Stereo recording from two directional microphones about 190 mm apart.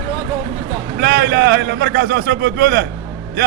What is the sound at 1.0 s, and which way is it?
A man's voice, 60° right (ahead or behind).